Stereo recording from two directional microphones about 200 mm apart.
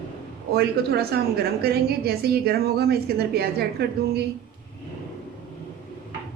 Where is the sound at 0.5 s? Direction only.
50° right (ahead or behind).